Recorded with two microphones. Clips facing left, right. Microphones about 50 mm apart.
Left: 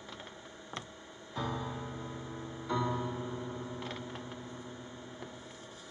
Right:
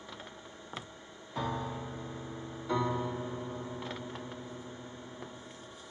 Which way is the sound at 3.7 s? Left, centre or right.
Centre.